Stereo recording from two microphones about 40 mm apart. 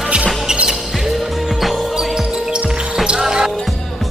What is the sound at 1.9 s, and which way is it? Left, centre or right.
Basketball bounce, centre.